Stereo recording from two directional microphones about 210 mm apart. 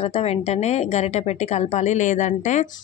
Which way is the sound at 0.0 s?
30° left (ahead or behind).